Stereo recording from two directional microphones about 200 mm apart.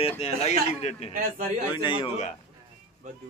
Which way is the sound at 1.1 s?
40° right (ahead or behind).